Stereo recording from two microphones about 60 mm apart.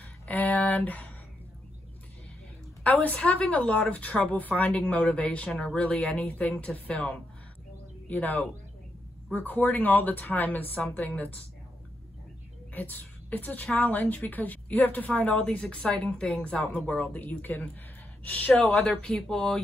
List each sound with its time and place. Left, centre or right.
0.0 s a sound: left
2.8 s a woman's voice: left
12.7 s a woman's voice: left
18.9 s speech: centre